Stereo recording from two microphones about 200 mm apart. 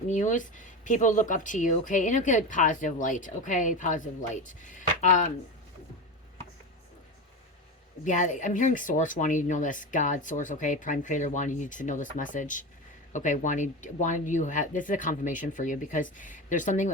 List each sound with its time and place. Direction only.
0.1 s speech: 40° left (ahead or behind)
8.0 s speech: 40° left (ahead or behind)